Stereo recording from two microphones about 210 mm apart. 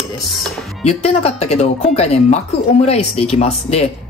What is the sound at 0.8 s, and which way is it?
Speech, 30° left (ahead or behind).